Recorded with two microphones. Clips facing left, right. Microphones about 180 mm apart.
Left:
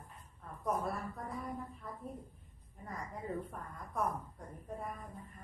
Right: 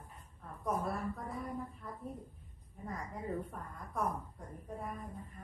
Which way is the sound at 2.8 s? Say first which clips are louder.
Right 2 dB; centre (ahead or behind).